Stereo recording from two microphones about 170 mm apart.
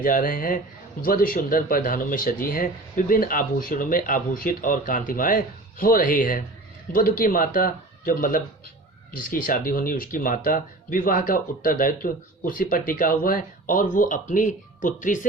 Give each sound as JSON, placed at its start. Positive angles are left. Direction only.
{"t": 0.0, "sound": "speech", "side_deg": 55}